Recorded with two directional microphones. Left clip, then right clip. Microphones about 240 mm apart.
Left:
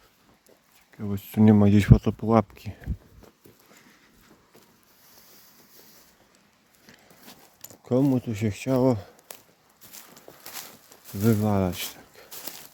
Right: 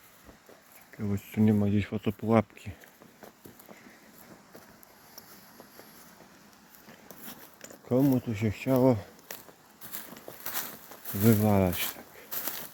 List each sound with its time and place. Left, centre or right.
1.3 s speech: left
2.0 s speech: left
7.3 s a sound: centre
7.9 s speech: left
10.4 s a sound: centre
11.2 s speech: centre